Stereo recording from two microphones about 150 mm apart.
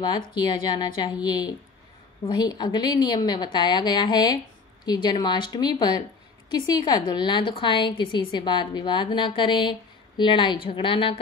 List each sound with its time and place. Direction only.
0.3 s a woman's voice: 30° left (ahead or behind)